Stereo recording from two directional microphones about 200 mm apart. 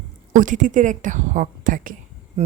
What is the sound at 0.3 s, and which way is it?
A woman's voice, 40° right (ahead or behind).